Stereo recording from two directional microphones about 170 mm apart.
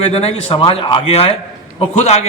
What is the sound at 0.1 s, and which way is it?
A man's voice, 35° left (ahead or behind).